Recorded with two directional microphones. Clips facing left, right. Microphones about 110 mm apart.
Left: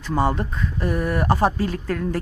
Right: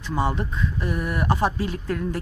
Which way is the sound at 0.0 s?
45° left (ahead or behind).